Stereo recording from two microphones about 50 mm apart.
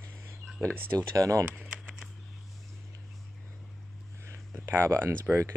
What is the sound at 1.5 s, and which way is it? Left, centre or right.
Typing, centre.